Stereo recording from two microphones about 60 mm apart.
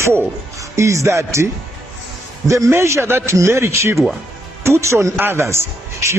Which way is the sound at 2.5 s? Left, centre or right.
Right.